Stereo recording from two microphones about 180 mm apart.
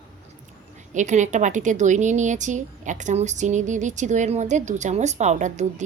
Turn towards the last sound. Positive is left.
turn(degrees=-40)  # may be behind; listen again after turning